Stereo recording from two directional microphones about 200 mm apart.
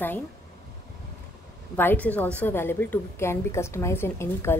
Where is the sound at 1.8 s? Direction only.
10° left (ahead or behind).